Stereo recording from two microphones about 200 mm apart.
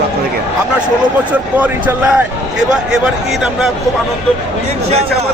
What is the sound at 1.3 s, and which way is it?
Speech, 5° right (ahead or behind).